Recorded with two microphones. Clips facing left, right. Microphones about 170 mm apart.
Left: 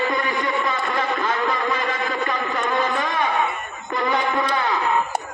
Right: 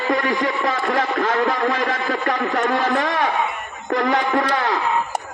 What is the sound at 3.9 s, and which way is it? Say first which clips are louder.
Music: right 3 dB; 85° right.